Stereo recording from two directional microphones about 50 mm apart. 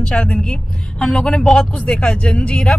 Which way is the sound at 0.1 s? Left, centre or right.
Centre.